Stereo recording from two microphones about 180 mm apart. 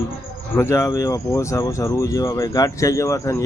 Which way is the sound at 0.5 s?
15° left (ahead or behind).